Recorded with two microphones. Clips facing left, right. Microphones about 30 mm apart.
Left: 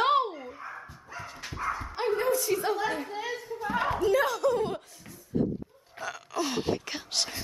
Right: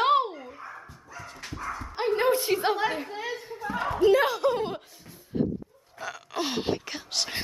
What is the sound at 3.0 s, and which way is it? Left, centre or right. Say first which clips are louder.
Speech: right 1 dB; centre.